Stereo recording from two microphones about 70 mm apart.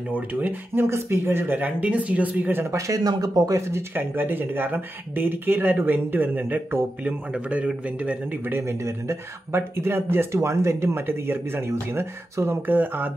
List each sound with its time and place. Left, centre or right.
0.1 s speech: right
3.0 s speech: right
3.9 s speech: right
7.1 s speech: centre
8.6 s speech: right